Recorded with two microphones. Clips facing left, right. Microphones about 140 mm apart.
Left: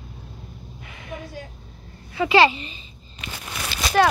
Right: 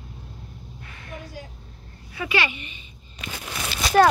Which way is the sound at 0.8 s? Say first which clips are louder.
Left 5 dB; 15° left (ahead or behind).